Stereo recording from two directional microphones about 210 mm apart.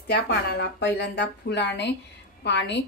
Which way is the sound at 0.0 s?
50° left (ahead or behind).